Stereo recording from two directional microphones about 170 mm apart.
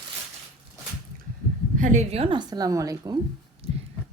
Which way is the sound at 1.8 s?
45° right (ahead or behind).